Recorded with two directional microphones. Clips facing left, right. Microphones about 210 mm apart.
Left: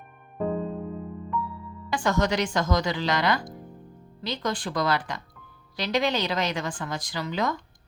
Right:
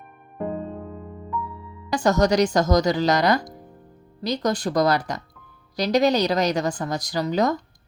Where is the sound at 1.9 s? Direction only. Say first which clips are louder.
Right 5 dB; 40° right (ahead or behind).